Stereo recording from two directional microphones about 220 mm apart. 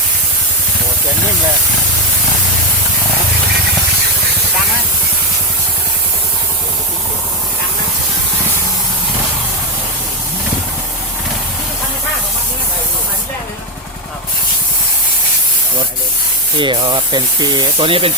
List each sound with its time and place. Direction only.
16.6 s speech: 20° right (ahead or behind)